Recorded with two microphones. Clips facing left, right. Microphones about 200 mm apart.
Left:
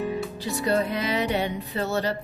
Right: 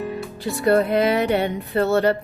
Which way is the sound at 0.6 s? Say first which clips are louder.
Right 8 dB; 60° right (ahead or behind).